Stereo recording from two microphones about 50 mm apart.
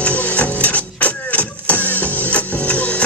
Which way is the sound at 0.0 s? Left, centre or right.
Left.